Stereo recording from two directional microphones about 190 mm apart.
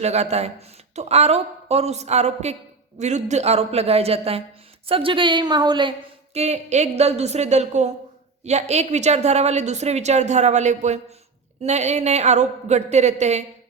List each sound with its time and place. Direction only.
0.0 s a woman's voice: 35° right (ahead or behind)
6.3 s speech: 35° right (ahead or behind)